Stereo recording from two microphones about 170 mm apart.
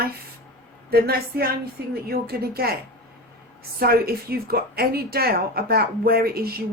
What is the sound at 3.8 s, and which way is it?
A woman's voice, 65° right (ahead or behind).